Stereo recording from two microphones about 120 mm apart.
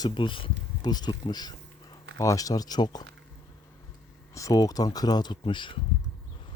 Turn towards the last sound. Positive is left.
turn(degrees=40)  # may be behind; listen again after turning